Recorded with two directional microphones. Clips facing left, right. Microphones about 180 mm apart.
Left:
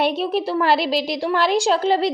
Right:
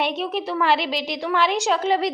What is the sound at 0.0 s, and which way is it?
A woman's voice, 35° left (ahead or behind).